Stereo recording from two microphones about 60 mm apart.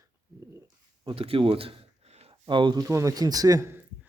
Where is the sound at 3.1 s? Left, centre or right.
Right.